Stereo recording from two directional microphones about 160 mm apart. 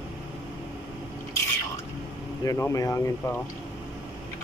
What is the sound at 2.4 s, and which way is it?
Speech, 20° left (ahead or behind).